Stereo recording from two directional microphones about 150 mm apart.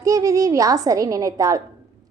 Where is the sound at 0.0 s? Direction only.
20° right (ahead or behind).